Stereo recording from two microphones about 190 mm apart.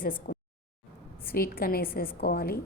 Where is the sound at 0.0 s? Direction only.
50° left (ahead or behind).